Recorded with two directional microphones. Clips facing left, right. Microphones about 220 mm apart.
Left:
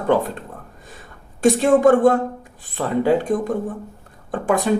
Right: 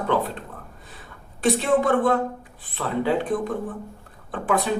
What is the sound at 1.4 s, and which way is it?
Speech, 45° left (ahead or behind).